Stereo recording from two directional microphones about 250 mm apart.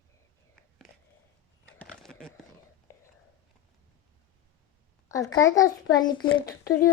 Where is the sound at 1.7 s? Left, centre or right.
Centre.